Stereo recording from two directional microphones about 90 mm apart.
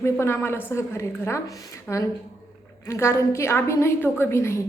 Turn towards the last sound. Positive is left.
turn(degrees=30)  # may be behind; listen again after turning